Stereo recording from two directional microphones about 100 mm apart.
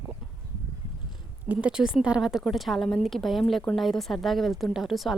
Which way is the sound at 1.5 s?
10° right (ahead or behind).